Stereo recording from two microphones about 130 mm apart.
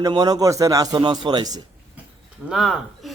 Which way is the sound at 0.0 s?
30° right (ahead or behind).